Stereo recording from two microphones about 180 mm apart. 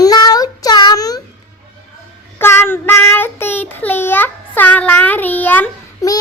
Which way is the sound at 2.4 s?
15° left (ahead or behind).